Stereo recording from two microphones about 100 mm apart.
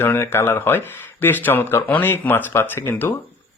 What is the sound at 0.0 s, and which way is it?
Speech, 20° left (ahead or behind).